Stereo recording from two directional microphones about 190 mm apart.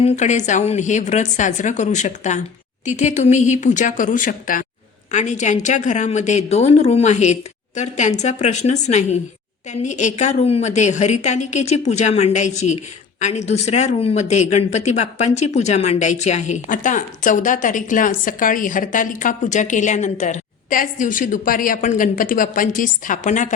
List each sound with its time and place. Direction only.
0.0 s a woman's voice: 40° left (ahead or behind)